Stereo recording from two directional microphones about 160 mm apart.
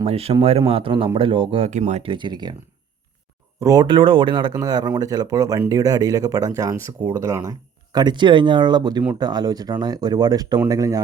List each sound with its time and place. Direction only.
0.0 s speech: 40° right (ahead or behind)
1.7 s speech: 45° right (ahead or behind)
2.0 s speech: 30° right (ahead or behind)
3.6 s speech: 25° right (ahead or behind)